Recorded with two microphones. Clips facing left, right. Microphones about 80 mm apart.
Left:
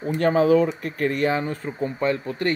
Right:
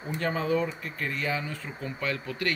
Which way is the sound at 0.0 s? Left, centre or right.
Left.